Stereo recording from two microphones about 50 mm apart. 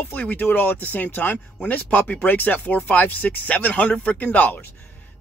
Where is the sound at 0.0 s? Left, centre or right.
Left.